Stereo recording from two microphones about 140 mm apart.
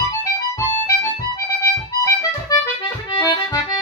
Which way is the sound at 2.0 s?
25° left (ahead or behind).